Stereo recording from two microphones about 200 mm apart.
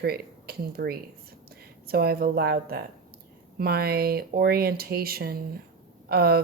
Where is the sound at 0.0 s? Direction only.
50° right (ahead or behind).